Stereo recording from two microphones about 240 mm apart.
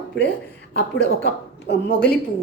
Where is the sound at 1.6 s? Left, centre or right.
Left.